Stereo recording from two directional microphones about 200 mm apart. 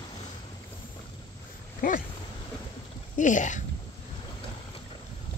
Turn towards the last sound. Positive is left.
turn(degrees=40)  # may be behind; listen again after turning